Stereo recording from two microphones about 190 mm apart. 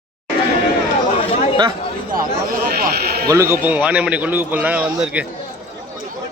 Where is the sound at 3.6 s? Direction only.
10° right (ahead or behind).